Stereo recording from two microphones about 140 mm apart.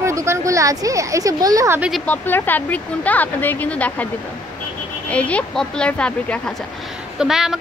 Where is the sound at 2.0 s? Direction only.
15° left (ahead or behind).